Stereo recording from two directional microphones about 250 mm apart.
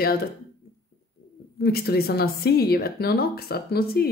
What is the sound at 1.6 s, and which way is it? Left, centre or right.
Speech, left.